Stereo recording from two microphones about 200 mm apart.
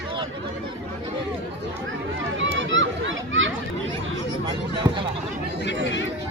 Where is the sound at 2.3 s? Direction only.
65° right (ahead or behind).